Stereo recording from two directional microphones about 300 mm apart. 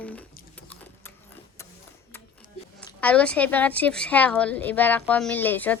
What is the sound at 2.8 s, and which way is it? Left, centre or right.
A woman's voice, centre.